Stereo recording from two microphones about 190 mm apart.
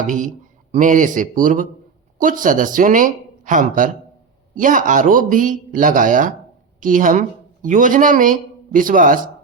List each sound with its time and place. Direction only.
0.0 s a man's voice: 45° right (ahead or behind)